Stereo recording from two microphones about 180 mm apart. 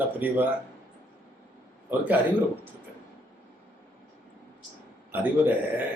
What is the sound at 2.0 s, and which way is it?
Speech, 10° right (ahead or behind).